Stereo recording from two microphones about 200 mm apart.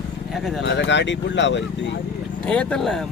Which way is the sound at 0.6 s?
65° left (ahead or behind).